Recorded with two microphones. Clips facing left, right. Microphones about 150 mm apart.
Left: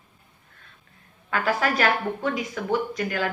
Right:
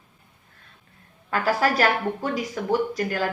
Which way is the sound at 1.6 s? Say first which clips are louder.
Right 3 dB; 40° right (ahead or behind).